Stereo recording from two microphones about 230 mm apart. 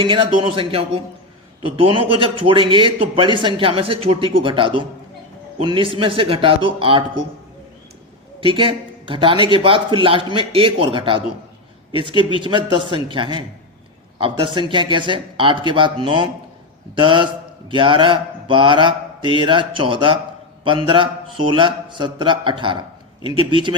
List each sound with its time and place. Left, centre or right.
0.0 s a man's voice: right
8.4 s a man's voice: right